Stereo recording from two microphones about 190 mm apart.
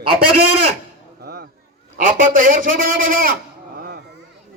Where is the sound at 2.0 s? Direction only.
45° right (ahead or behind).